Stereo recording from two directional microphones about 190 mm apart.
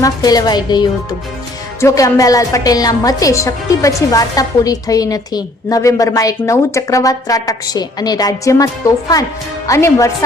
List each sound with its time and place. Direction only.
0.0 s a woman's voice: 20° left (ahead or behind)